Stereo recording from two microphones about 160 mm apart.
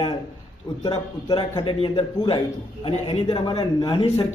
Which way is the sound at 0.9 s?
25° left (ahead or behind).